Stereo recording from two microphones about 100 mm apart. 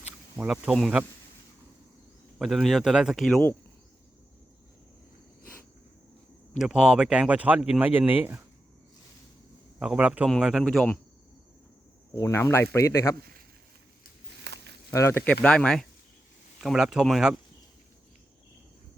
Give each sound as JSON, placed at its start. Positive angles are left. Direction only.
{"t": 0.3, "sound": "speech", "side_deg": -10}
{"t": 2.4, "sound": "speech", "side_deg": 0}
{"t": 6.6, "sound": "speech", "side_deg": -5}
{"t": 9.7, "sound": "speech", "side_deg": -10}
{"t": 10.4, "sound": "speech", "side_deg": 0}
{"t": 12.1, "sound": "speech", "side_deg": 25}
{"t": 14.8, "sound": "speech", "side_deg": 30}
{"t": 15.2, "sound": "speech", "side_deg": 10}
{"t": 16.6, "sound": "speech", "side_deg": -5}